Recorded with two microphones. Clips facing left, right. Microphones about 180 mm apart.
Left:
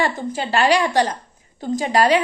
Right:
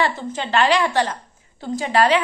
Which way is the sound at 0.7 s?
40° left (ahead or behind).